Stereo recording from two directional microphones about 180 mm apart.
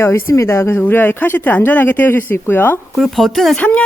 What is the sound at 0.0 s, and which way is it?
Speech, 15° left (ahead or behind).